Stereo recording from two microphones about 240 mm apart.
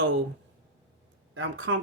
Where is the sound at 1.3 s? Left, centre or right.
Right.